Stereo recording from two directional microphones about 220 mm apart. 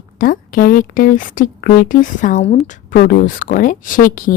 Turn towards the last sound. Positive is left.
turn(degrees=40)  # may be behind; listen again after turning